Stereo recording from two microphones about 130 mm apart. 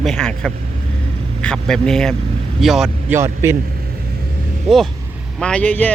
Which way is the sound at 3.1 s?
20° right (ahead or behind).